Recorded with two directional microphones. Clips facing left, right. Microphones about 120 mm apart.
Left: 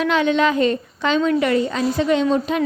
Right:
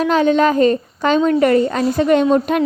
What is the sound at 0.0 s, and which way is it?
A woman's voice, 40° right (ahead or behind).